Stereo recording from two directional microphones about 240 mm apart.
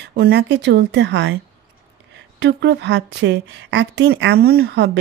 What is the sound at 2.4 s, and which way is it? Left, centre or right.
A woman's voice, right.